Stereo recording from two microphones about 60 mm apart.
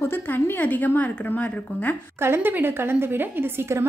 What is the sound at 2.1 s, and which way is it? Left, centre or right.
A woman's voice, right.